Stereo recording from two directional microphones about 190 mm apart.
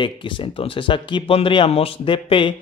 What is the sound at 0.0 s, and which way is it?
Speech, 25° left (ahead or behind).